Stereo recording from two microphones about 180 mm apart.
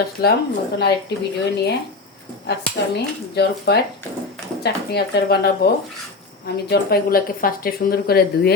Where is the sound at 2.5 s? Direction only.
65° left (ahead or behind).